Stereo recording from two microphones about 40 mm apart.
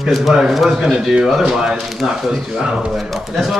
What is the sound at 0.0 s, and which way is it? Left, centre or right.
Speech, centre.